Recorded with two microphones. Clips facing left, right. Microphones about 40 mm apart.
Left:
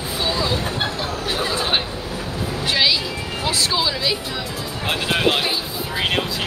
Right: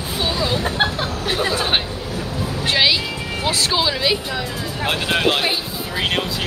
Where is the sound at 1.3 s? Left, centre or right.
Centre.